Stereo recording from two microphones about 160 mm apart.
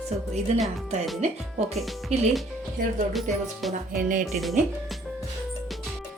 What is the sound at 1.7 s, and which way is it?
Speech, centre (ahead or behind).